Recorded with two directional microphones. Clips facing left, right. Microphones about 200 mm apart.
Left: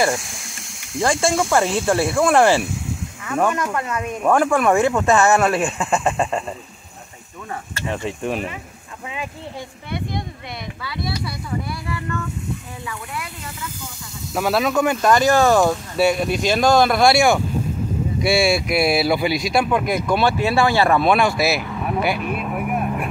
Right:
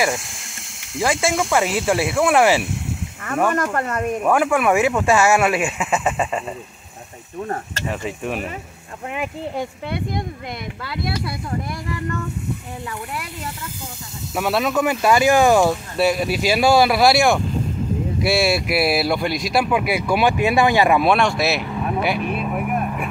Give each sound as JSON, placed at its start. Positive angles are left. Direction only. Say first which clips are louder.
{"t": 0.9, "sound": "speech", "louder": "left 1 dB", "side_deg": -5}
{"t": 3.7, "sound": "speech", "louder": "right 2 dB", "side_deg": -50}
{"t": 4.2, "sound": "speech", "louder": "left 2 dB", "side_deg": -5}
{"t": 7.9, "sound": "speech", "louder": "left 2 dB", "side_deg": -5}
{"t": 14.3, "sound": "speech", "louder": "left 1 dB", "side_deg": 0}
{"t": 21.1, "sound": "speech", "louder": "left 1 dB", "side_deg": 0}